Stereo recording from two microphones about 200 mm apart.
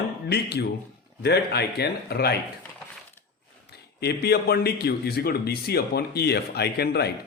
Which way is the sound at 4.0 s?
55° left (ahead or behind).